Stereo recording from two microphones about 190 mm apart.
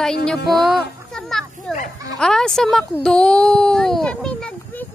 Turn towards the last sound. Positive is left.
turn(degrees=5)  # may be behind; listen again after turning